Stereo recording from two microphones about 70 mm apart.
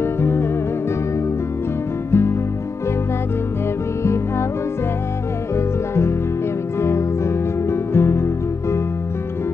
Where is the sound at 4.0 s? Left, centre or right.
Left.